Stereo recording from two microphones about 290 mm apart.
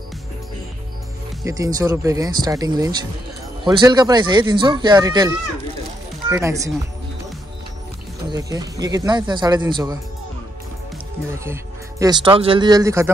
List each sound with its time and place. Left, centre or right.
1.4 s speech: centre
8.3 s speech: centre
11.3 s speech: centre